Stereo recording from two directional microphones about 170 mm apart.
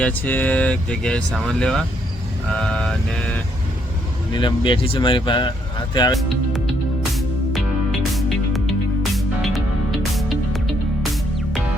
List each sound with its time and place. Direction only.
0.0 s speech: 10° left (ahead or behind)
4.3 s speech: 30° left (ahead or behind)
6.1 s speech: centre (ahead or behind)
8.1 s music: centre (ahead or behind)